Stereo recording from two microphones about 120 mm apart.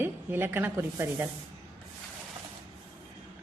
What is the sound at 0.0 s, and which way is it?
A woman's voice, 20° right (ahead or behind).